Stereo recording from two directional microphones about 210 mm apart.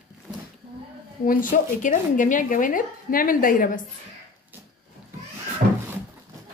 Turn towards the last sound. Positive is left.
turn(degrees=-40)  # may be behind; listen again after turning